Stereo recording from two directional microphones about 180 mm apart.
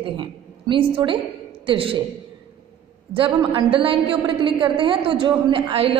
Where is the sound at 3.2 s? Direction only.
25° right (ahead or behind).